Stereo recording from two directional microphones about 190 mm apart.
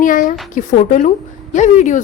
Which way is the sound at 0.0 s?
45° left (ahead or behind).